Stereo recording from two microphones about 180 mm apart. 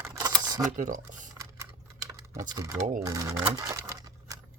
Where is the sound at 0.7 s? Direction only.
45° right (ahead or behind).